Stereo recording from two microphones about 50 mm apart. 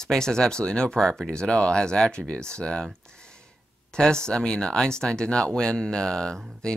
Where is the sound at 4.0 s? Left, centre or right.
Centre.